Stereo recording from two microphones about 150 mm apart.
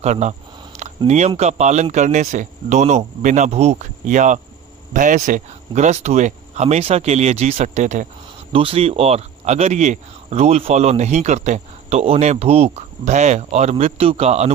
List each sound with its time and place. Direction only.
0.0 s speech: 50° right (ahead or behind)
0.8 s a sound: 50° right (ahead or behind)
1.4 s speech: 50° right (ahead or behind)
8.5 s speech: 40° right (ahead or behind)